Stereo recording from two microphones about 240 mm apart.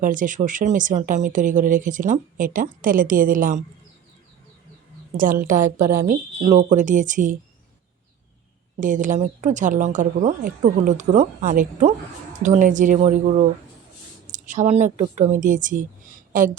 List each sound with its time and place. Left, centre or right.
0.0 s speech: right
5.1 s speech: right
5.8 s a woman's voice: centre
6.4 s speech: right
8.8 s speech: right